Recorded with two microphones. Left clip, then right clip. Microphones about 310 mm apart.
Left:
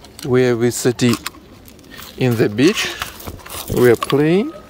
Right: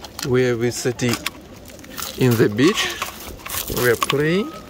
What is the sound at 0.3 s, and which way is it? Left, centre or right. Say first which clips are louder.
Speech: left 4 dB; centre.